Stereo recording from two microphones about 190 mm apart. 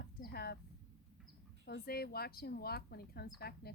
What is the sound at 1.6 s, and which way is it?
Speech, 55° left (ahead or behind).